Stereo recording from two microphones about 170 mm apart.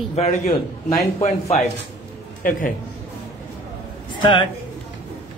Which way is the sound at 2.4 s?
55° left (ahead or behind).